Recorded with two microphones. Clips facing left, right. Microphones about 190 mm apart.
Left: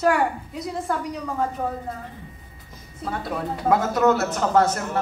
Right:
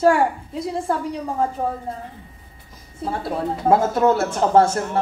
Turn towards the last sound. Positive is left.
turn(degrees=-30)  # may be behind; listen again after turning